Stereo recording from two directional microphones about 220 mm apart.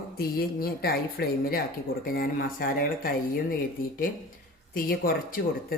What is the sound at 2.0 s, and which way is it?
Cutlery, 40° left (ahead or behind).